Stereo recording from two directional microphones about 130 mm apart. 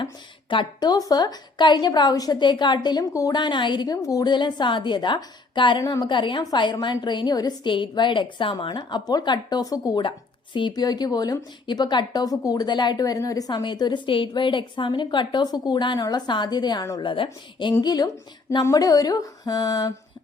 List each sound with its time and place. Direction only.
0.5 s a woman's voice: 35° left (ahead or behind)